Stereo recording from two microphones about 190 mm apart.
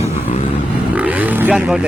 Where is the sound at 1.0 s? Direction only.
10° right (ahead or behind).